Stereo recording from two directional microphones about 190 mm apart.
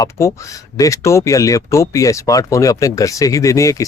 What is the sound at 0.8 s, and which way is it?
A man's voice, 15° left (ahead or behind).